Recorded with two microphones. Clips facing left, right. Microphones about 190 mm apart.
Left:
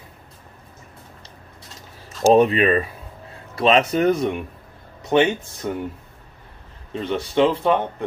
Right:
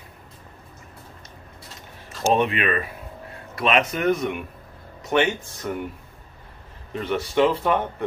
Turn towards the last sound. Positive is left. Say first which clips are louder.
# left 2 dB
turn(degrees=20)  # may be behind; listen again after turning